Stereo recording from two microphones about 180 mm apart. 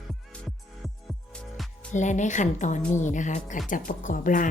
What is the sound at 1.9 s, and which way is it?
Speech, 40° left (ahead or behind).